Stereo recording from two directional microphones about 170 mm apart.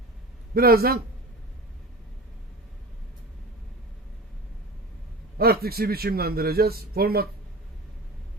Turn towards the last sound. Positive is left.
turn(degrees=-60)  # may be behind; listen again after turning